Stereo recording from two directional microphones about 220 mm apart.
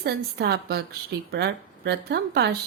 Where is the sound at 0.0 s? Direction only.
45° right (ahead or behind).